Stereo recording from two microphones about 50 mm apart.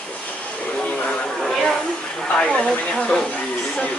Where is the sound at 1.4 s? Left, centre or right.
Centre.